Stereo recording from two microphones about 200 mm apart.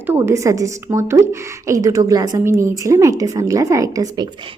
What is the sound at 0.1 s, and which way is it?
A woman's voice, 10° right (ahead or behind).